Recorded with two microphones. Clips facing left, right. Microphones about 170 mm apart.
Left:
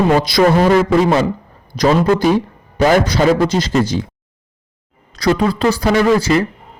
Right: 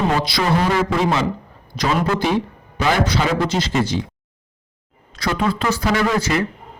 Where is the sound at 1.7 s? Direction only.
40° left (ahead or behind).